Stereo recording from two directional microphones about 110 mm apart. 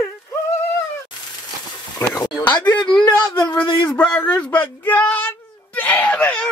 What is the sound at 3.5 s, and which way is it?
Speech, 35° left (ahead or behind).